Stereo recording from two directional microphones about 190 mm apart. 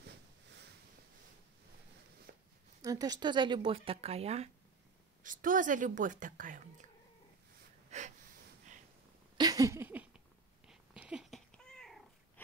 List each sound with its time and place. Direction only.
2.8 s speech: 20° right (ahead or behind)
5.2 s speech: 45° right (ahead or behind)
7.9 s wheeze: 35° right (ahead or behind)
9.4 s a sound: 20° right (ahead or behind)
10.7 s cat: 5° right (ahead or behind)